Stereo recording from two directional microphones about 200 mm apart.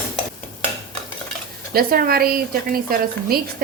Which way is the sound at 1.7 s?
50° right (ahead or behind).